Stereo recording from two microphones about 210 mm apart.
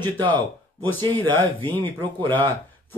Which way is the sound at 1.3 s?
10° left (ahead or behind).